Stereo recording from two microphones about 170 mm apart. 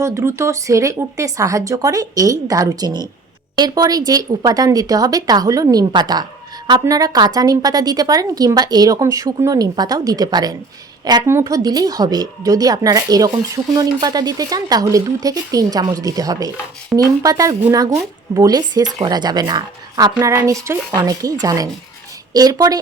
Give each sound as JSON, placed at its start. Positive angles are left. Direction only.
{"t": 0.0, "sound": "a woman's voice", "side_deg": -15}